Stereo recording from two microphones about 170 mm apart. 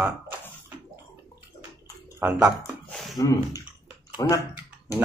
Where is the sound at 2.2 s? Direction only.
10° right (ahead or behind).